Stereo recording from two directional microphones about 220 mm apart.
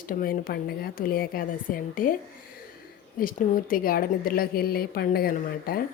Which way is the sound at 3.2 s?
40° left (ahead or behind).